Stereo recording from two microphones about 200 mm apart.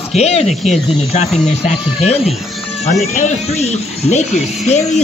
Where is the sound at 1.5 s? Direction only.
30° left (ahead or behind).